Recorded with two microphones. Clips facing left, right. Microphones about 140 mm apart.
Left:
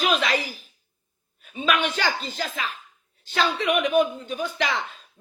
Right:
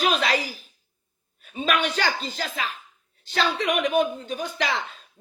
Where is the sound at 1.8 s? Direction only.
40° right (ahead or behind).